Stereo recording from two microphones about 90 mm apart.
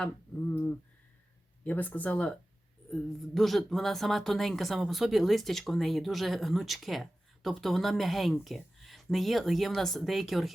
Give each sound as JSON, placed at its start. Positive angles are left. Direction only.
{"t": 1.6, "sound": "speech", "side_deg": 15}
{"t": 2.9, "sound": "speech", "side_deg": 0}